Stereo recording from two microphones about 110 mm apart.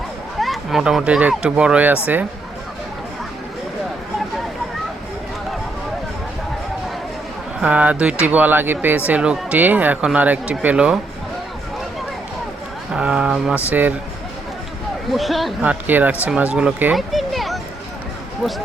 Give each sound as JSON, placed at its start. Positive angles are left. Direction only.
{"t": 0.3, "sound": "speech", "side_deg": 0}
{"t": 7.6, "sound": "speech", "side_deg": -10}
{"t": 12.9, "sound": "speech", "side_deg": -10}
{"t": 15.1, "sound": "speech", "side_deg": 0}
{"t": 15.6, "sound": "speech", "side_deg": -15}